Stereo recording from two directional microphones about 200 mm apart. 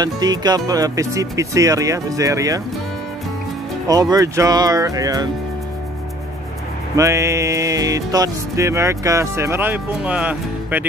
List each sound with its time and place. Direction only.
0.0 s music: 20° right (ahead or behind)
3.8 s music: 20° right (ahead or behind)
7.0 s music: 15° right (ahead or behind)